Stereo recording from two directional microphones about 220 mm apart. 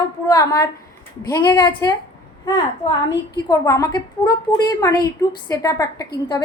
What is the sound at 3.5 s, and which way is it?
A woman's voice, 15° left (ahead or behind).